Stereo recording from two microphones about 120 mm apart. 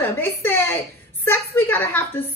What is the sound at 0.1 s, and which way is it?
A woman's voice, 20° left (ahead or behind).